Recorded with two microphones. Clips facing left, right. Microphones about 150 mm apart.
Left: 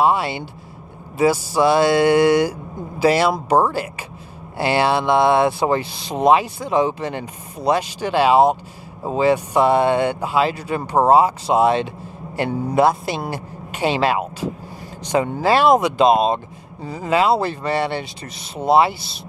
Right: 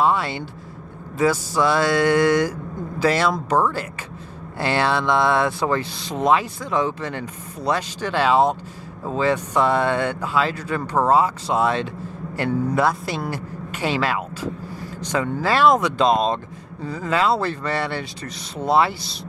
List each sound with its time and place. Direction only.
0.0 s speech: 10° left (ahead or behind)
4.6 s a man's voice: 15° left (ahead or behind)